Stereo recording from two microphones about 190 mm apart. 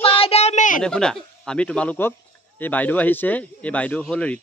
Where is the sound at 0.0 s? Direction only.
30° left (ahead or behind).